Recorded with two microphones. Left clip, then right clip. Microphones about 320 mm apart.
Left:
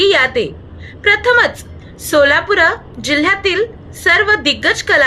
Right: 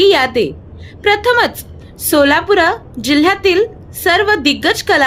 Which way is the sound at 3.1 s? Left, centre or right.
Right.